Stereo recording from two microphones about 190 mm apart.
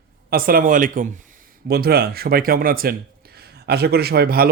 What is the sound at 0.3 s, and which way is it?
Speech, 50° right (ahead or behind).